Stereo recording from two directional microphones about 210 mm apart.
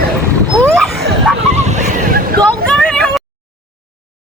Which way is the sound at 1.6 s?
35° right (ahead or behind).